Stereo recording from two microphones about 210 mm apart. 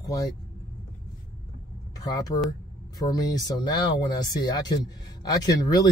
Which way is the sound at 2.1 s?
15° left (ahead or behind).